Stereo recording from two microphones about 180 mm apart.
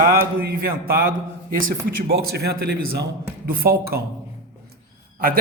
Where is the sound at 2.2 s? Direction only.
60° right (ahead or behind).